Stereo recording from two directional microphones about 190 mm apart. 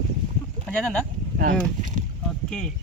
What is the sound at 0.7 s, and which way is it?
Speech, 5° left (ahead or behind).